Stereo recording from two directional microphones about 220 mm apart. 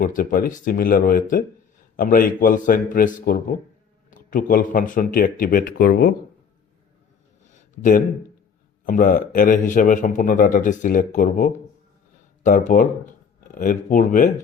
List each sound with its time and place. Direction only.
0.0 s a man's voice: 40° left (ahead or behind)
7.8 s a man's voice: 35° left (ahead or behind)